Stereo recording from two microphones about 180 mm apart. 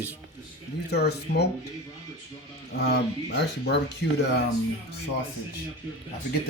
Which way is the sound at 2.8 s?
70° left (ahead or behind).